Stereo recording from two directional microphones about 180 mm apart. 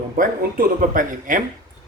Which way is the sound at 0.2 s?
50° right (ahead or behind).